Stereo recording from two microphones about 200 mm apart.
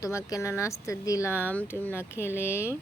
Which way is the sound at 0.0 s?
15° left (ahead or behind).